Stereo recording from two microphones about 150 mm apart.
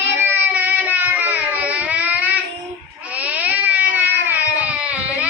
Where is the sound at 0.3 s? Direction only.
10° right (ahead or behind).